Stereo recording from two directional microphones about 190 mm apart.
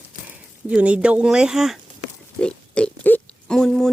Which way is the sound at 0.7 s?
5° right (ahead or behind).